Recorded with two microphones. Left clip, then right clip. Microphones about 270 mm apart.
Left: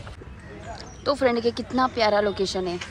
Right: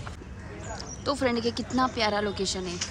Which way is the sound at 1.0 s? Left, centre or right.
Centre.